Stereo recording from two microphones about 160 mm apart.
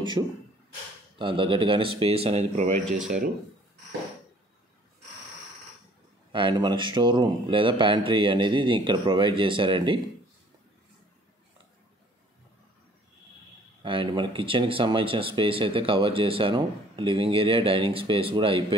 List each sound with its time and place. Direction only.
0.2 s speech: 30° right (ahead or behind)
6.3 s speech: 30° right (ahead or behind)
13.8 s speech: 30° right (ahead or behind)